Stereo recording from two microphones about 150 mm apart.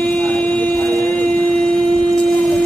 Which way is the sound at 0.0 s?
10° left (ahead or behind).